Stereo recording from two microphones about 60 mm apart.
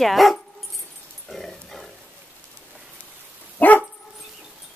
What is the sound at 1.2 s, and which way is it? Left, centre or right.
Dog, centre.